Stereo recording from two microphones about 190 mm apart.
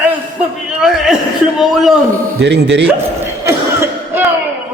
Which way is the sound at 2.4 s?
60° right (ahead or behind).